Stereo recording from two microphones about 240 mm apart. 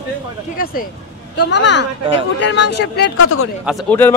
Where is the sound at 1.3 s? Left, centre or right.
Left.